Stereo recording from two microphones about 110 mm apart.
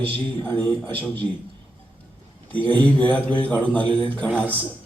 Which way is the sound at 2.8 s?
15° left (ahead or behind).